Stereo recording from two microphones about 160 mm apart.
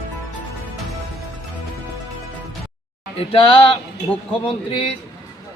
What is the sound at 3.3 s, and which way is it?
Speech, 35° left (ahead or behind).